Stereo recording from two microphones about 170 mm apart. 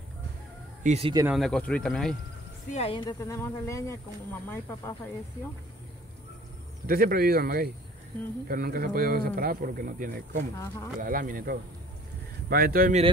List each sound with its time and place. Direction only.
0.8 s speech: 40° right (ahead or behind)
1.3 s speech: 5° left (ahead or behind)
2.7 s speech: 35° left (ahead or behind); by 4.0 s 15° left (ahead or behind)
6.9 s a man's voice: 60° right (ahead or behind)